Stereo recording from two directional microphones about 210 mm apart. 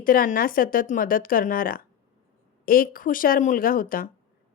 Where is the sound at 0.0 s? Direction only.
40° left (ahead or behind).